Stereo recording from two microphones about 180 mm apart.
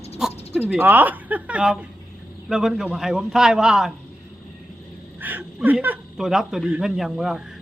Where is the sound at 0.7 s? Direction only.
10° right (ahead or behind).